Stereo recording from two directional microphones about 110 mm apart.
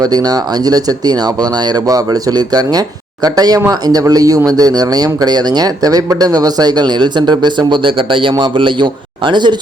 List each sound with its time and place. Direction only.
0.0 s speech: 35° right (ahead or behind)